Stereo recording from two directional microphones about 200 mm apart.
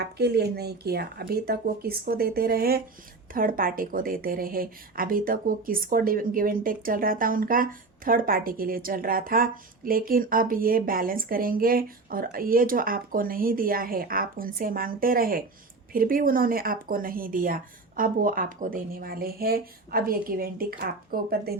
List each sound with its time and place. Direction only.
0.0 s a woman's voice: 55° right (ahead or behind)